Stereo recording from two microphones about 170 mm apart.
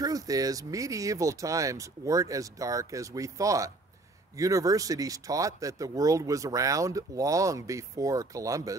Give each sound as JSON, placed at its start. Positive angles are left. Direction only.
{"t": 0.0, "sound": "speech", "side_deg": -20}